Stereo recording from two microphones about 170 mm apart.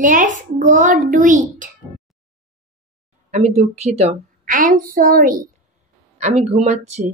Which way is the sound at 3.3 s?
40° right (ahead or behind).